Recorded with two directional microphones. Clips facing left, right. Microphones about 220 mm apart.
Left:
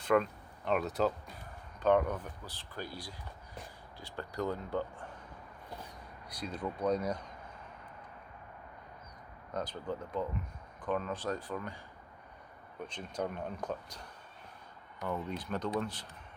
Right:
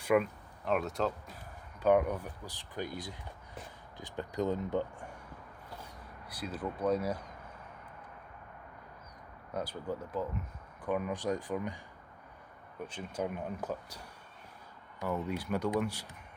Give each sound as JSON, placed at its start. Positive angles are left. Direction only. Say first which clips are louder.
{"t": 0.0, "sound": "speech", "louder": "right 1 dB", "side_deg": -10}
{"t": 1.8, "sound": "speech", "louder": "right 1 dB", "side_deg": -10}
{"t": 6.2, "sound": "speech", "louder": "even", "side_deg": -5}
{"t": 9.5, "sound": "speech", "louder": "right 1 dB", "side_deg": -10}
{"t": 12.9, "sound": "speech", "louder": "right 1 dB", "side_deg": -5}